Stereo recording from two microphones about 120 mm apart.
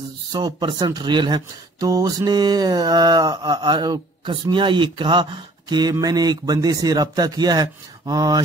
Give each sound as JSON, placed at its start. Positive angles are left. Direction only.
{"t": 0.3, "sound": "speech", "side_deg": -35}